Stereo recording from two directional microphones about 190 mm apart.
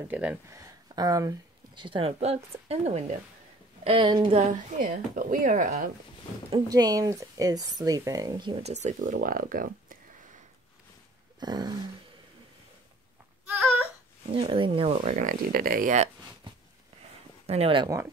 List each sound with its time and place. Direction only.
0.1 s a woman's voice: 10° right (ahead or behind); by 5.9 s 45° right (ahead or behind)
6.5 s speech: 20° right (ahead or behind); by 9.9 s 50° right (ahead or behind)
11.3 s a sound: 20° right (ahead or behind)
14.3 s speech: 25° right (ahead or behind); by 16.1 s 45° right (ahead or behind)
17.5 s speech: 30° right (ahead or behind)